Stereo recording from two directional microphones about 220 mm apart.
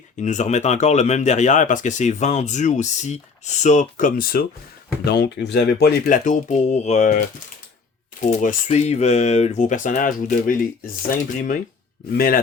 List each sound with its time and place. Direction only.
0.2 s speech: 30° left (ahead or behind)
12.1 s speech: 40° left (ahead or behind)